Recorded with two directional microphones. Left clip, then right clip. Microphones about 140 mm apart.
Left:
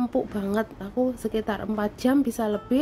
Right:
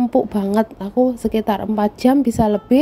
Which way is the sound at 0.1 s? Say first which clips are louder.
Right 9 dB; 35° right (ahead or behind).